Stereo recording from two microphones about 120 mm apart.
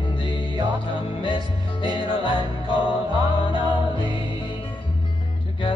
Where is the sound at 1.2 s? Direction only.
45° left (ahead or behind).